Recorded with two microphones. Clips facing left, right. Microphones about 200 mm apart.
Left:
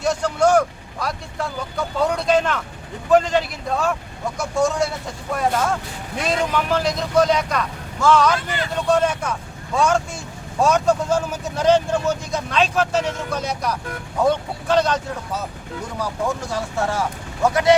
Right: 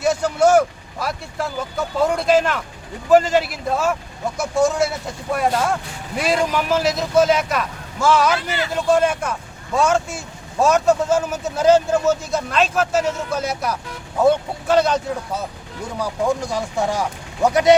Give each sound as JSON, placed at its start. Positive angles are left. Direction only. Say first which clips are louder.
{"t": 0.0, "sound": "vehicle", "louder": "right 2 dB", "side_deg": -5}
{"t": 3.1, "sound": "speech", "louder": "right 2 dB", "side_deg": -5}